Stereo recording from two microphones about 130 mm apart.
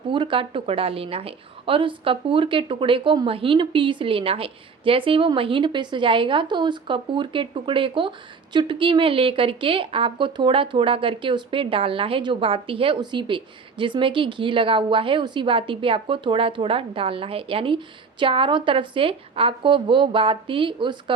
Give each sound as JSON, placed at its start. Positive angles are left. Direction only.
{"t": 0.1, "sound": "a woman's voice", "side_deg": -40}